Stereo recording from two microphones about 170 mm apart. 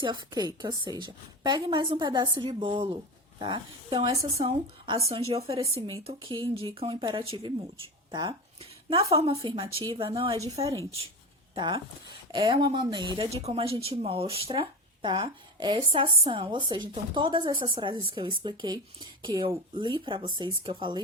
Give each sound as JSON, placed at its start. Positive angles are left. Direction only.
{"t": 0.0, "sound": "speech", "side_deg": -25}
{"t": 11.5, "sound": "speech", "side_deg": -30}